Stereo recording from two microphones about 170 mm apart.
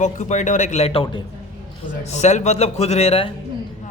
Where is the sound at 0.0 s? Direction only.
45° left (ahead or behind).